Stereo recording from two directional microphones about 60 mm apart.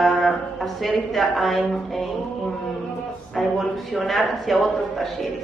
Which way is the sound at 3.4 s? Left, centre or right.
Centre.